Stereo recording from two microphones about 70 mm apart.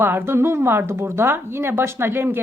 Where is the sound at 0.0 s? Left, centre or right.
Right.